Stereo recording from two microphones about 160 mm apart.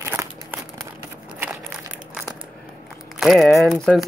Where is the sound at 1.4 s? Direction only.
5° right (ahead or behind).